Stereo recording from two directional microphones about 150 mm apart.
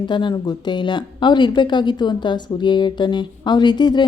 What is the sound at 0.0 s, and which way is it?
Speech, 30° left (ahead or behind).